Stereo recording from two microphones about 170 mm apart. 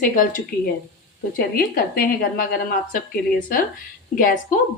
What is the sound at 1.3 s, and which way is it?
Speech, 60° left (ahead or behind).